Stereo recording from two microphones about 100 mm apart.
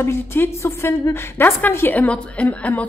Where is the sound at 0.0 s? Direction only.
25° left (ahead or behind).